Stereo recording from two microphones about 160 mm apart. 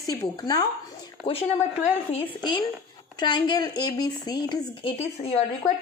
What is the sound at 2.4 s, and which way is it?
Speech, 25° left (ahead or behind).